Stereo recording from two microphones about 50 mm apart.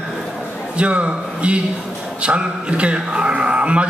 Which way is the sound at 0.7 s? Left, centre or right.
Right.